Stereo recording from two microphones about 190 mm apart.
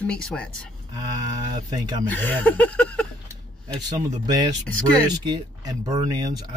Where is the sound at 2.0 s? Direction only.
10° left (ahead or behind).